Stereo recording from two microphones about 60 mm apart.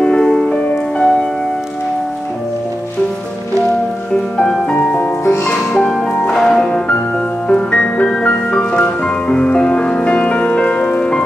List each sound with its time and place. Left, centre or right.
0.0 s music: centre
4.1 s music: centre
4.7 s music: left
5.2 s music: left
5.8 s music: centre